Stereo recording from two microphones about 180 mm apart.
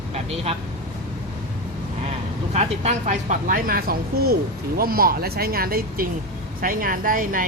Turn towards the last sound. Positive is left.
turn(degrees=-50)  # may be behind; listen again after turning